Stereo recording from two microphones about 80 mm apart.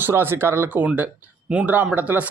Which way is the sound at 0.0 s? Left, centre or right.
Right.